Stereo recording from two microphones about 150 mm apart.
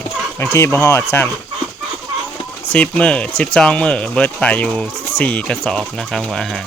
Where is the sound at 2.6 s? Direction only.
10° left (ahead or behind).